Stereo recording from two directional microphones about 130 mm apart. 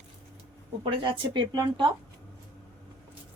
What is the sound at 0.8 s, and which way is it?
A woman's voice, 45° right (ahead or behind).